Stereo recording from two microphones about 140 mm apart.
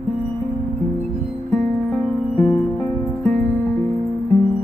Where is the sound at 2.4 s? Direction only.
20° left (ahead or behind).